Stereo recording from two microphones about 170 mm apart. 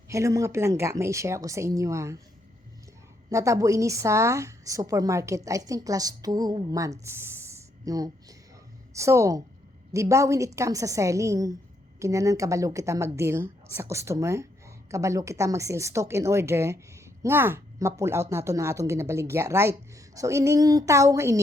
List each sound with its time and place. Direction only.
0.1 s speech: 15° right (ahead or behind)
3.2 s a woman's voice: 20° right (ahead or behind)
7.0 s a sound: 15° right (ahead or behind)
9.0 s speech: 15° right (ahead or behind)